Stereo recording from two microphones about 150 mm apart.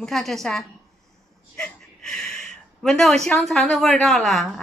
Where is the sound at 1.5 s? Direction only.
5° left (ahead or behind).